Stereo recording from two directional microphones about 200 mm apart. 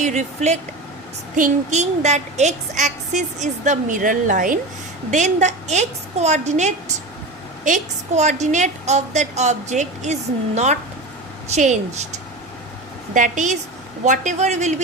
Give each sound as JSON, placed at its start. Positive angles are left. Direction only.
{"t": 0.0, "sound": "a woman's voice", "side_deg": -35}
{"t": 13.1, "sound": "a woman's voice", "side_deg": -40}